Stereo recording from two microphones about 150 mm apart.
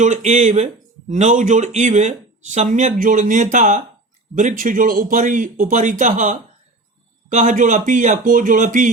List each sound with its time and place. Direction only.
0.0 s speech: 50° right (ahead or behind)